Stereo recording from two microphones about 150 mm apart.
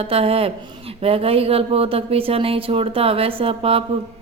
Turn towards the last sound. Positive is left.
turn(degrees=-40)  # may be behind; listen again after turning